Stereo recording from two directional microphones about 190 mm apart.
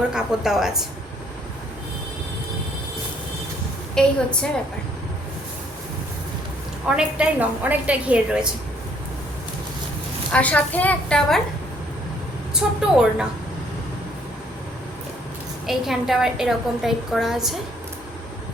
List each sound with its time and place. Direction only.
0.1 s a woman's voice: 5° right (ahead or behind)
4.0 s a woman's voice: 5° left (ahead or behind)
6.8 s a woman's voice: 5° right (ahead or behind)
10.3 s a woman's voice: 5° left (ahead or behind)
12.5 s a woman's voice: 5° right (ahead or behind)
15.6 s a woman's voice: centre (ahead or behind)